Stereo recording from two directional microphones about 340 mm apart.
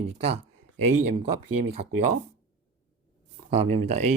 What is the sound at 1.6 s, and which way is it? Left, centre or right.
Speech, centre.